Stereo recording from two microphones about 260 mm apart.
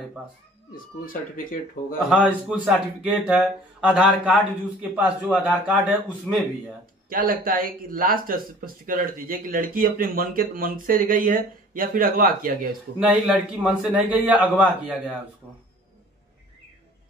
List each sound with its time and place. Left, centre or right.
1.0 s speech: left
2.0 s speech: centre
7.1 s speech: right
13.1 s speech: centre